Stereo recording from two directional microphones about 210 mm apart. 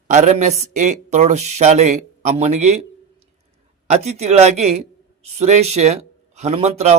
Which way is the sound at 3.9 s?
30° right (ahead or behind).